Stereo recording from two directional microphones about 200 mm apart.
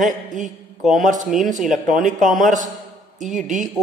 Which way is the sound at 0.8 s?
Centre (ahead or behind).